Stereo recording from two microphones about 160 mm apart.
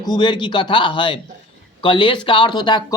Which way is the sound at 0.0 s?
25° left (ahead or behind).